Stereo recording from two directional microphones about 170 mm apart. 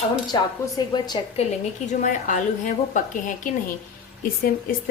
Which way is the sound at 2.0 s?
50° left (ahead or behind).